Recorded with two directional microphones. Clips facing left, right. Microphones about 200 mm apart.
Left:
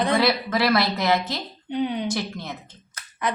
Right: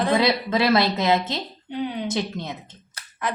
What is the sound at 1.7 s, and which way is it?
Speech, 5° right (ahead or behind).